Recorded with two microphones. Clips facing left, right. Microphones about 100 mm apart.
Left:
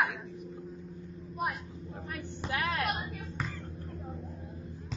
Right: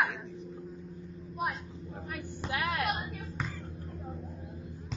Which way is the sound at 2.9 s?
Centre (ahead or behind).